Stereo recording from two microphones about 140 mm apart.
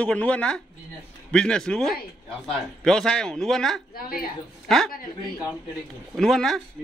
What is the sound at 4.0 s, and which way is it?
Speech, 90° left.